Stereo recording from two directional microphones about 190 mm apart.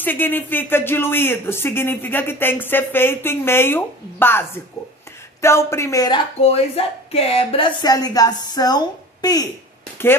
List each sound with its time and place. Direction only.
0.0 s speech: 10° left (ahead or behind)